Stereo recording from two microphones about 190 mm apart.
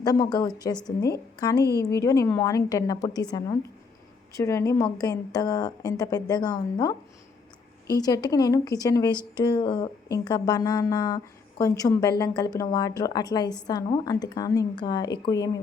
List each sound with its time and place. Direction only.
0.0 s speech: 20° left (ahead or behind)
1.5 s a woman's voice: 60° left (ahead or behind)
1.9 s a woman's voice: 15° left (ahead or behind)